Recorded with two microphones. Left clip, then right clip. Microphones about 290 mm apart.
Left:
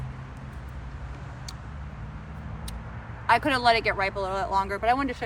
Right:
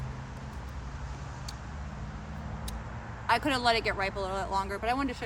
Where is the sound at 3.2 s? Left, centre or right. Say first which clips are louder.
Left 5 dB; centre.